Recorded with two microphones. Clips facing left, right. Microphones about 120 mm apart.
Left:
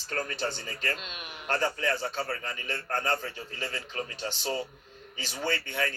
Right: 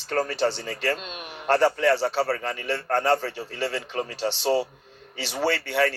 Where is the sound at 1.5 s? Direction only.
75° right (ahead or behind).